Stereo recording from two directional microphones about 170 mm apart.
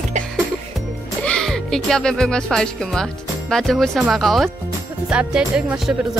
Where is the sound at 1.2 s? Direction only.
5° left (ahead or behind).